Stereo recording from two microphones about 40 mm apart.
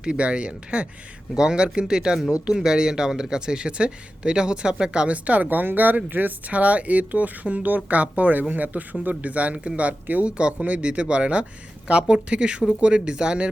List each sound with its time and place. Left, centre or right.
0.0 s speech: right
5.0 s speech: right
6.5 s speech: right
10.2 s speech: right